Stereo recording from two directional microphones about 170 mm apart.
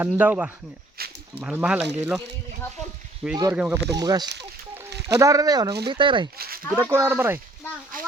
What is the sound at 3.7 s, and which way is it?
Speech, 20° right (ahead or behind).